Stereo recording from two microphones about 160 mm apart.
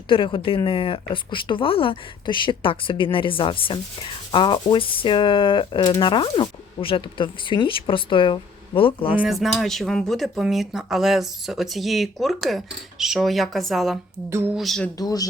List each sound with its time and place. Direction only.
0.1 s speech: 30° left (ahead or behind)
9.2 s speech: centre (ahead or behind)
14.3 s a sound: 15° right (ahead or behind)
14.5 s speech: centre (ahead or behind)
14.9 s speech: 25° left (ahead or behind)